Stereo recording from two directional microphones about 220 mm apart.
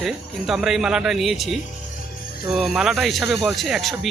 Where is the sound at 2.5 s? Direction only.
Centre (ahead or behind).